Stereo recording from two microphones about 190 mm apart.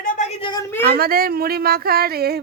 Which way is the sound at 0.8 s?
55° right (ahead or behind).